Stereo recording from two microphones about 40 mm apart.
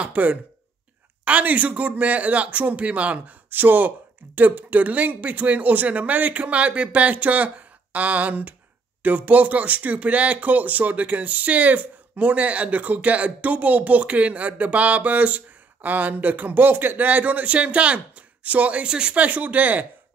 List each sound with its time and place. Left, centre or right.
0.0 s speech: right
3.4 s speech: right
18.9 s speech: right
19.1 s speech: right